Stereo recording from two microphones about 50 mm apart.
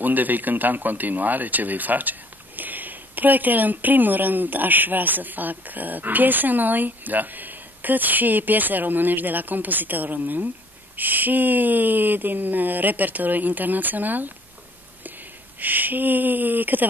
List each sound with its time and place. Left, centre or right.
0.0 s speech: right
15.6 s speech: right